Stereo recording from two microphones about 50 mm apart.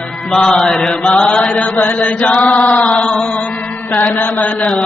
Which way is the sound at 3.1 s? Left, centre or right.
Centre.